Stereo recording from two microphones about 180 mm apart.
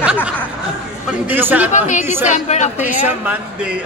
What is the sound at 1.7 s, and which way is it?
Speech, 40° left (ahead or behind).